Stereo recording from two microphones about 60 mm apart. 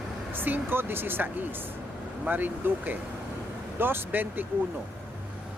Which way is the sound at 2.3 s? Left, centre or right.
Right.